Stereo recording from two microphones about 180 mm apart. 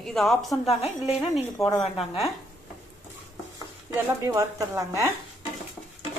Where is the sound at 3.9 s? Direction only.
20° right (ahead or behind).